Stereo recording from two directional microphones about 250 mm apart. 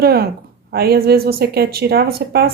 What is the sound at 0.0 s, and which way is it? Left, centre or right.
Speech, right.